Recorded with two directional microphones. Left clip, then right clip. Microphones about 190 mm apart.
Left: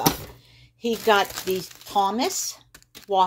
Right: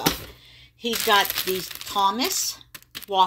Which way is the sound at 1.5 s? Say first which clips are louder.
Left 1 dB; centre (ahead or behind).